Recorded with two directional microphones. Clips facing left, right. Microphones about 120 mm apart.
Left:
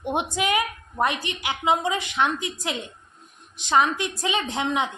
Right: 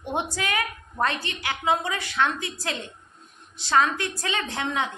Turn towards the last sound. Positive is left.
turn(degrees=20)  # may be behind; listen again after turning